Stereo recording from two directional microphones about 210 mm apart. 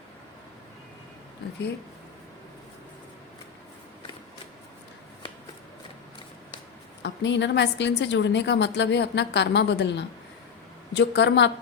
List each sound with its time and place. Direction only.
1.4 s speech: 50° left (ahead or behind)
7.0 s a woman's voice: 60° left (ahead or behind)